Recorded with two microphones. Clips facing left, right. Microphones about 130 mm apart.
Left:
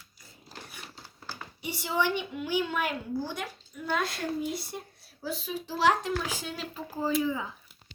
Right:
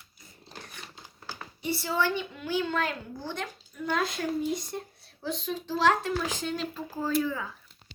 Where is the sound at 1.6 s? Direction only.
15° left (ahead or behind).